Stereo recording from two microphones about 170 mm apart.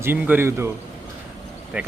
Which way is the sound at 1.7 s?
10° right (ahead or behind).